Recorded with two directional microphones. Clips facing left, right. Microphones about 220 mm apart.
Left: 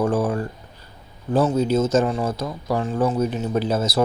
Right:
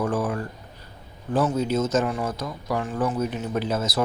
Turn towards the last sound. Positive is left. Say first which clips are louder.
# left 4 dB
turn(degrees=30)  # may be behind; listen again after turning